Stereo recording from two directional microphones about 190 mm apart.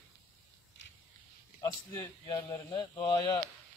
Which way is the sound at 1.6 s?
20° left (ahead or behind).